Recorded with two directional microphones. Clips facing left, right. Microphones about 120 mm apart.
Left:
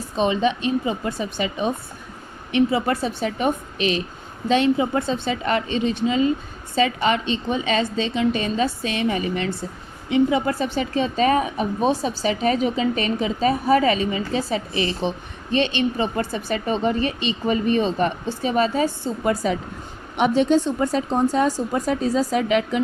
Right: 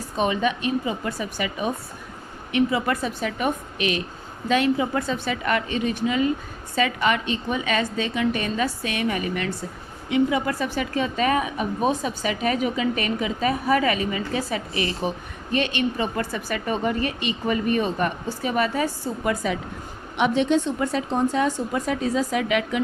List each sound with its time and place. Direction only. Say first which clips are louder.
0.2 s a woman's voice: left 3 dB; 25° left (ahead or behind)